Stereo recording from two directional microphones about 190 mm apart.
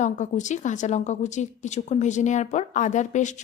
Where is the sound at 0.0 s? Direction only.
40° left (ahead or behind).